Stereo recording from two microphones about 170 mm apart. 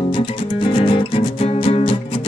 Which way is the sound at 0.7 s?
30° left (ahead or behind).